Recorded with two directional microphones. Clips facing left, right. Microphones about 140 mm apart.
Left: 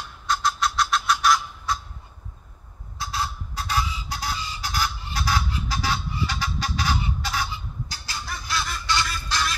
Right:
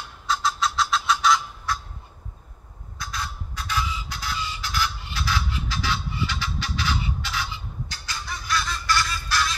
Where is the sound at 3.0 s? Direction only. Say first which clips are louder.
Left 4 dB; 30° left (ahead or behind).